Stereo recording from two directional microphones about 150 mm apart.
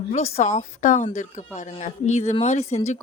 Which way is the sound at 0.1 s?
45° left (ahead or behind).